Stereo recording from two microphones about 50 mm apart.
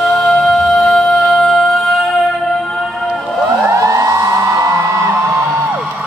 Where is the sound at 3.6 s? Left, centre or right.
Right.